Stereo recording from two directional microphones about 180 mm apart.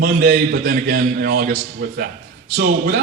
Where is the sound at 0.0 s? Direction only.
55° right (ahead or behind).